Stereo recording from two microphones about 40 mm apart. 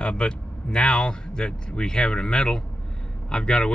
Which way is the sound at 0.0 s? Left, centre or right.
Left.